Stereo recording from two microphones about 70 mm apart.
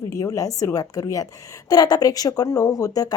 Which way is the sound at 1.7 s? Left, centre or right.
Left.